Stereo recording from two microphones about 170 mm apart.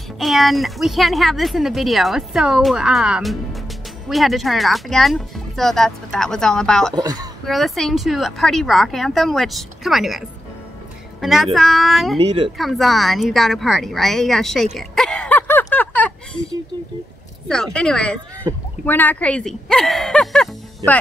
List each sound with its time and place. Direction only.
0.2 s speech: centre (ahead or behind)
7.0 s speech: 20° right (ahead or behind)
7.4 s a woman's voice: centre (ahead or behind)
17.7 s speech: 5° left (ahead or behind)